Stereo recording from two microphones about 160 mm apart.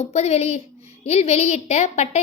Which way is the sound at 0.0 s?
45° left (ahead or behind).